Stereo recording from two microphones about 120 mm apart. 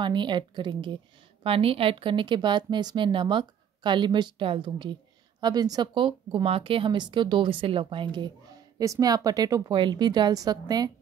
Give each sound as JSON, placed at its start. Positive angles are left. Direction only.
{"t": 0.0, "sound": "speech", "side_deg": -40}
{"t": 1.4, "sound": "speech", "side_deg": -50}
{"t": 8.7, "sound": "speech", "side_deg": -30}